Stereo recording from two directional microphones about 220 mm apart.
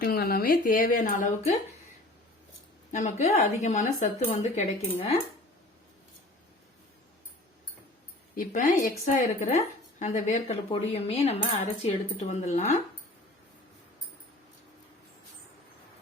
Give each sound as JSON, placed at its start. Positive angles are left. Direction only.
{"t": 0.0, "sound": "a woman's voice", "side_deg": 45}
{"t": 2.9, "sound": "a woman's voice", "side_deg": 30}
{"t": 8.4, "sound": "a woman's voice", "side_deg": 35}